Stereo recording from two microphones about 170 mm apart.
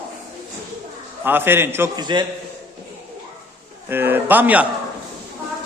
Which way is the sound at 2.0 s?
25° right (ahead or behind).